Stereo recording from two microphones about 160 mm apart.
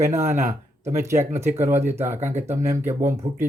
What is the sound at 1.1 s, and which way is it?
Speech, 45° right (ahead or behind).